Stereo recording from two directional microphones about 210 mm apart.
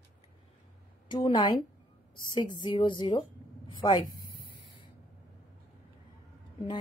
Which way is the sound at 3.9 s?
25° left (ahead or behind).